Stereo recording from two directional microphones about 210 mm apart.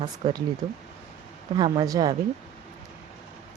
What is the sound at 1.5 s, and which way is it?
Speech, 20° right (ahead or behind).